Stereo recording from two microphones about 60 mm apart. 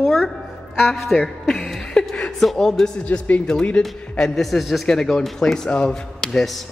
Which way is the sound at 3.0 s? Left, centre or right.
Left.